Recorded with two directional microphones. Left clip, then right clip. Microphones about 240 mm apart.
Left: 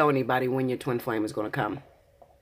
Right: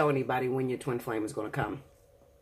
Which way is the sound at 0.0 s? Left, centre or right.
Left.